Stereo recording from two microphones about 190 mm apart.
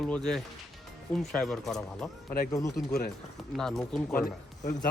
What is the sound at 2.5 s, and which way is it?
Speech, 20° left (ahead or behind).